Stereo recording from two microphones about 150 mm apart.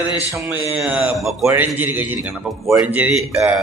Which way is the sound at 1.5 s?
10° right (ahead or behind).